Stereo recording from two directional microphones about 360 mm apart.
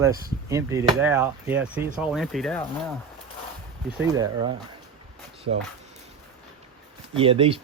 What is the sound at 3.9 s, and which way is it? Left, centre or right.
Speech, centre.